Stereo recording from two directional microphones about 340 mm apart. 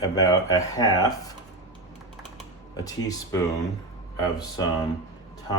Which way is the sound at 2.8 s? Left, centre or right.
Centre.